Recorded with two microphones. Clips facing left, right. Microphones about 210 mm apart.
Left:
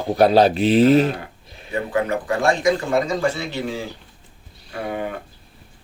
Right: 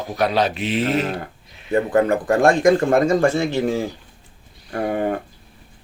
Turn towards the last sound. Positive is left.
turn(degrees=-50)  # may be behind; listen again after turning